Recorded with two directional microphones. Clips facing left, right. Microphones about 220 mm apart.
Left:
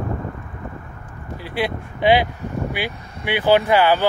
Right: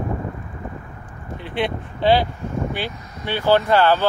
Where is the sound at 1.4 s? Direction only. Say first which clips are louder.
Even; 5° left (ahead or behind).